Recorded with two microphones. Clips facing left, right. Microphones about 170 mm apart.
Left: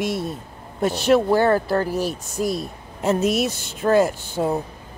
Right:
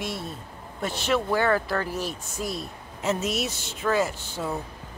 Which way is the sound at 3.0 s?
55° left (ahead or behind).